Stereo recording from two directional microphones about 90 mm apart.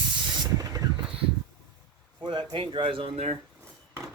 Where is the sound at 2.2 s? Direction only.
60° right (ahead or behind); by 3.4 s 80° right.